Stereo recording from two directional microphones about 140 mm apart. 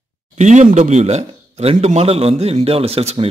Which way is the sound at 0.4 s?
60° right (ahead or behind).